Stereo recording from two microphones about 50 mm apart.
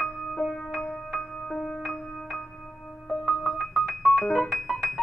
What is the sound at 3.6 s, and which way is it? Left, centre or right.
Keyboard, centre.